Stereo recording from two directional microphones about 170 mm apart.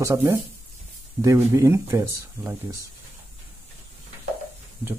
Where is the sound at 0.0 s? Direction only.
15° right (ahead or behind).